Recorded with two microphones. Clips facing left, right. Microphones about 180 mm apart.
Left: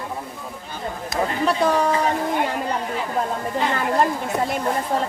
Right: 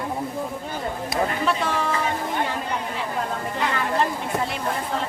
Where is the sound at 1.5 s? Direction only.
40° left (ahead or behind).